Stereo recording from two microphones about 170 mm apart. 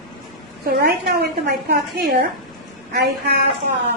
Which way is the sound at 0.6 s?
60° right (ahead or behind).